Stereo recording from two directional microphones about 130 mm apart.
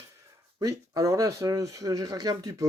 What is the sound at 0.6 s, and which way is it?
Speech, 30° right (ahead or behind).